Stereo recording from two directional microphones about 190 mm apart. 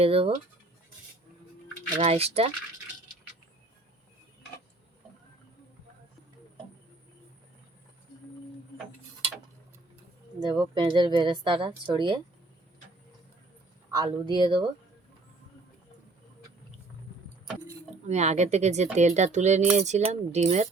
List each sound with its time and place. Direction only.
0.0 s speech: 30° right (ahead or behind)
2.0 s speech: 35° right (ahead or behind)
10.4 s speech: 25° right (ahead or behind)
13.9 s speech: 20° right (ahead or behind)
18.1 s speech: 35° right (ahead or behind)